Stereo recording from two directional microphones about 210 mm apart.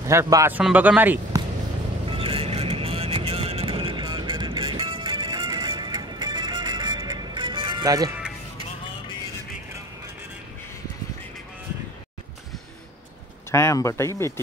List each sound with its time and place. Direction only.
0.0 s speech: 15° right (ahead or behind)
2.0 s vehicle: 25° right (ahead or behind)
13.5 s speech: 15° left (ahead or behind)